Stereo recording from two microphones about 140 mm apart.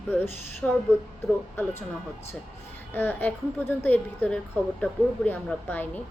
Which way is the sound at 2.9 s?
15° left (ahead or behind).